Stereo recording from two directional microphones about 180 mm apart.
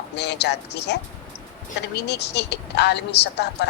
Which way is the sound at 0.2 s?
70° left (ahead or behind).